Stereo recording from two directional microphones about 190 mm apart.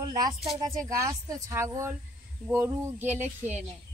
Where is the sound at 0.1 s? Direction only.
20° right (ahead or behind).